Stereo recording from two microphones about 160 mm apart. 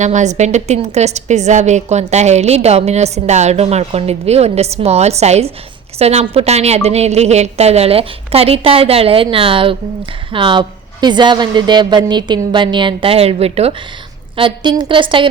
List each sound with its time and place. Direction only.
0.0 s a woman's voice: 50° right (ahead or behind); by 15.3 s 30° right (ahead or behind)